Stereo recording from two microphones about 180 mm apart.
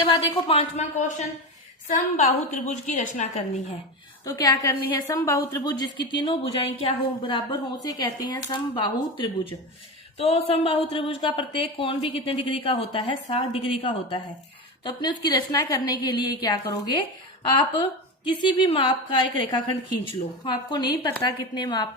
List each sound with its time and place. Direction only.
0.4 s a woman's voice: 40° left (ahead or behind)
4.4 s a woman's voice: 20° left (ahead or behind)
18.3 s a woman's voice: 25° left (ahead or behind)